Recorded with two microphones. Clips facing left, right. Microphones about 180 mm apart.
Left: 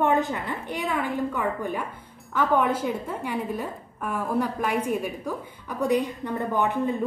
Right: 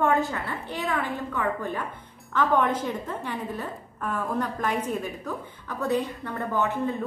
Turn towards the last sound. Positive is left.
turn(degrees=15)  # may be behind; listen again after turning